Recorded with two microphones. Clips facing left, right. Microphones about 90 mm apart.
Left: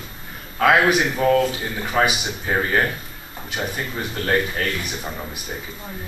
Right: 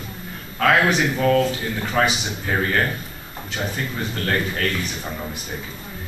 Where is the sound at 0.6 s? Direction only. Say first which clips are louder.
Left 1 dB; 10° left (ahead or behind).